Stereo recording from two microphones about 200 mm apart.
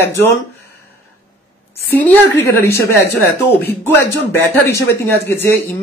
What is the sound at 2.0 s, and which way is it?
Speech, 10° left (ahead or behind).